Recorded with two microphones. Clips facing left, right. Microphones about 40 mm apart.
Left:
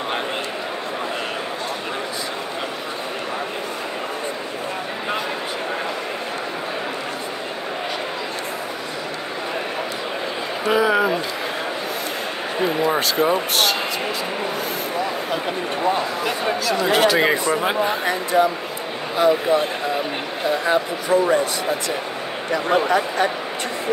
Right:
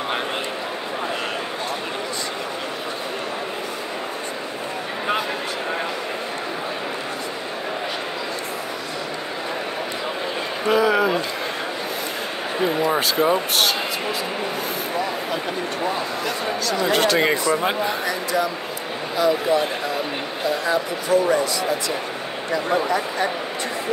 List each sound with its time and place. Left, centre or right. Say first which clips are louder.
10.7 s a sound: even; centre
12.6 s speech: even; centre
16.9 s speech: left 2 dB; centre
17.8 s speech: left 2 dB; left
20.6 s speech: left 2 dB; left
22.7 s speech: left 4 dB; left